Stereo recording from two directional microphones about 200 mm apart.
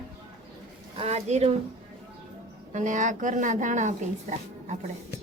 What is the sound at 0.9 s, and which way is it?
Speech, 35° right (ahead or behind).